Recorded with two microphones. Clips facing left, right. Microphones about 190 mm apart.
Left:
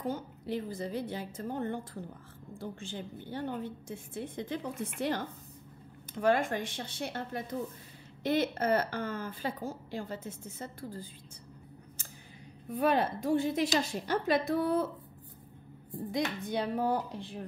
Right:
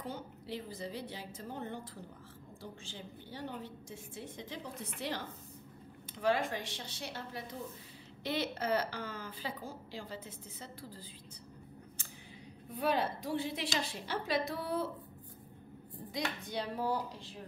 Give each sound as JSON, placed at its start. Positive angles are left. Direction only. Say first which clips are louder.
{"t": 0.0, "sound": "a woman's voice", "louder": "left 7 dB", "side_deg": 50}
{"t": 12.7, "sound": "a woman's voice", "louder": "left 5 dB", "side_deg": 55}
{"t": 16.1, "sound": "a woman's voice", "louder": "left 6 dB", "side_deg": 55}